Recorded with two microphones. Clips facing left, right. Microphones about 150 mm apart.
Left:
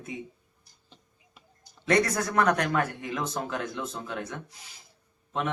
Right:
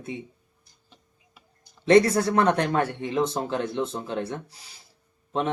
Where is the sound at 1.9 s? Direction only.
30° right (ahead or behind).